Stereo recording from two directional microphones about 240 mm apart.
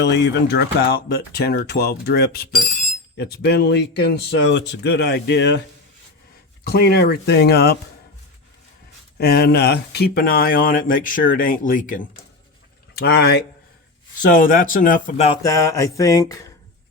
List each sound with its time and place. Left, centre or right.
0.0 s speech: left
6.7 s speech: left
9.1 s speech: left
15.3 s a sound: centre